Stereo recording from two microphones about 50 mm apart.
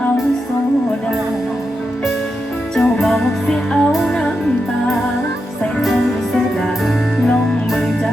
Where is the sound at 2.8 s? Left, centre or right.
Left.